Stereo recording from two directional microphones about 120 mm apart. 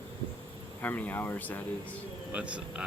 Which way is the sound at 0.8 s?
15° left (ahead or behind).